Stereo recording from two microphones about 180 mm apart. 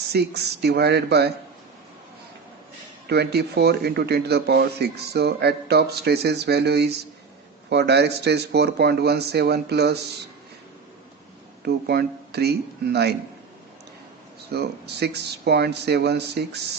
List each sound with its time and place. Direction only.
0.1 s speech: 65° right (ahead or behind)
3.1 s speech: 65° right (ahead or behind)
11.6 s speech: 60° right (ahead or behind)
14.5 s speech: 65° right (ahead or behind)